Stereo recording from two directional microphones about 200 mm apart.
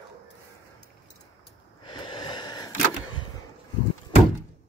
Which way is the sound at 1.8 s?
25° left (ahead or behind).